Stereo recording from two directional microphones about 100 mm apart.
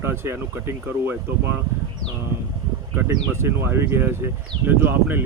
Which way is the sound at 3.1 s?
25° right (ahead or behind).